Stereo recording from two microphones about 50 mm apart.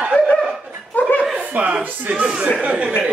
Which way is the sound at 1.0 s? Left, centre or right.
Left.